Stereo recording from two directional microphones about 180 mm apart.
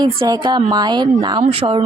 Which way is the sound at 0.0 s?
25° right (ahead or behind).